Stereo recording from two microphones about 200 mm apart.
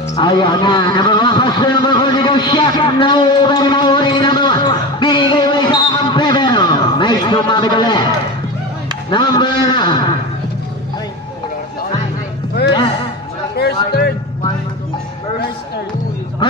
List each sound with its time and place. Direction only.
0.1 s a man's voice: 25° left (ahead or behind)
9.1 s a man's voice: 20° left (ahead or behind)
13.6 s a sound: 55° left (ahead or behind)